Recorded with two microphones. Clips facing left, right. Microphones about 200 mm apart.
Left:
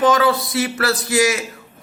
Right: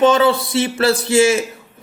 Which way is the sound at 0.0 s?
25° right (ahead or behind).